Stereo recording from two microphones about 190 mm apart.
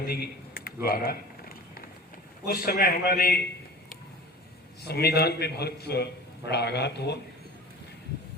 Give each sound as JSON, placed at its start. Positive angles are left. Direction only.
{"t": 0.1, "sound": "a sound", "side_deg": 55}
{"t": 2.5, "sound": "a man's voice", "side_deg": 50}
{"t": 4.8, "sound": "a man's voice", "side_deg": 55}